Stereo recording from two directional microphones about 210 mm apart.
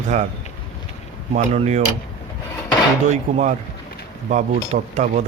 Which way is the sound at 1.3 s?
35° right (ahead or behind).